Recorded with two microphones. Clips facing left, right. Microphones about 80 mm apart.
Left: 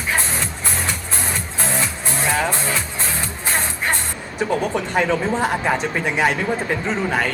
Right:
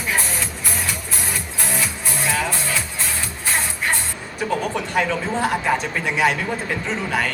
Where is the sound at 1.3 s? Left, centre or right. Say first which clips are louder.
Left 2 dB; left.